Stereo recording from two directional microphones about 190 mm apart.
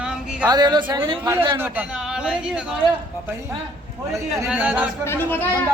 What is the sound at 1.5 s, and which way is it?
Speech, 10° right (ahead or behind).